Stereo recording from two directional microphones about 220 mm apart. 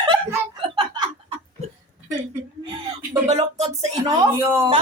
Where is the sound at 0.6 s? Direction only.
20° right (ahead or behind).